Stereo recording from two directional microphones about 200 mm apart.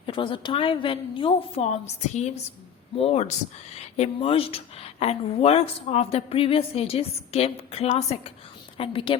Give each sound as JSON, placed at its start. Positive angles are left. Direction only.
{"t": 0.0, "sound": "speech", "side_deg": 25}